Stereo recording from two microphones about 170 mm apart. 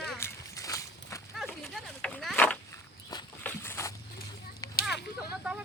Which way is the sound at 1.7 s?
5° left (ahead or behind).